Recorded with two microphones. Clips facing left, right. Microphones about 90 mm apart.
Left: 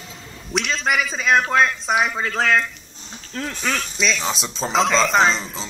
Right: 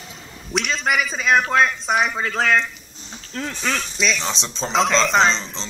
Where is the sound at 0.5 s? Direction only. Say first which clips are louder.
Even; centre (ahead or behind).